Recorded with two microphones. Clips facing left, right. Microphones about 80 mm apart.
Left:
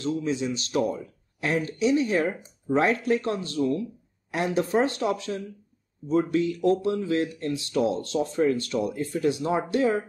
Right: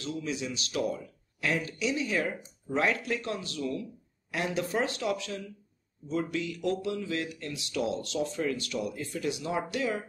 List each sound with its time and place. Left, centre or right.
0.0 s speech: left